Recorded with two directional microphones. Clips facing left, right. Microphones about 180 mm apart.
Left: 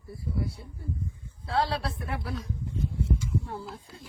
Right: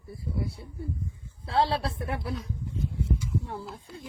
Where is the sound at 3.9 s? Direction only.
Centre (ahead or behind).